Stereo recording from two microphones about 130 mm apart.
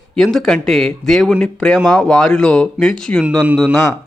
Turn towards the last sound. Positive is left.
turn(degrees=0)  # may be behind; listen again after turning